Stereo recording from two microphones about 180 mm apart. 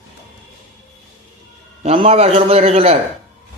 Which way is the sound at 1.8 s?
35° right (ahead or behind).